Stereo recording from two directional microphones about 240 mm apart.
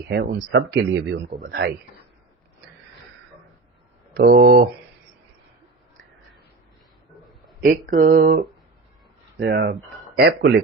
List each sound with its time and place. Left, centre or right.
0.1 s a man's voice: right
4.1 s speech: right
7.6 s a man's voice: right